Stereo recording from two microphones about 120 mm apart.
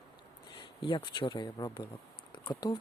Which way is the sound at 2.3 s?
40° left (ahead or behind).